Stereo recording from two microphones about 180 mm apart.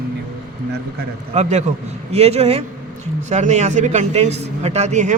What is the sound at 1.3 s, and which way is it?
A man's voice, 40° right (ahead or behind).